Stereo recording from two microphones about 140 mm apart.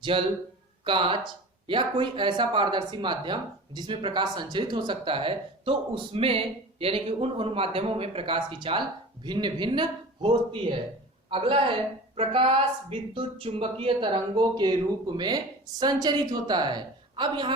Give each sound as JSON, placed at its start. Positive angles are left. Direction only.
{"t": 0.1, "sound": "speech", "side_deg": -40}